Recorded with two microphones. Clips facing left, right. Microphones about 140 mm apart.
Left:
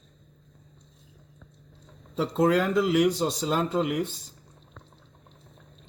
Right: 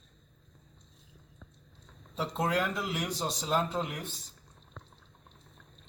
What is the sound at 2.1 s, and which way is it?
Speech, 90° left.